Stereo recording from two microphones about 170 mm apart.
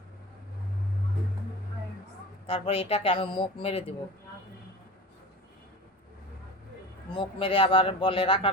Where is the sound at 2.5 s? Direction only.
35° left (ahead or behind).